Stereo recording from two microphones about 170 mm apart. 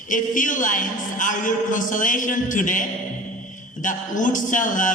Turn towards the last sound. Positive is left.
turn(degrees=50)  # may be behind; listen again after turning